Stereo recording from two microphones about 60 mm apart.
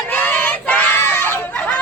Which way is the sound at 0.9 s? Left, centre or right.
Left.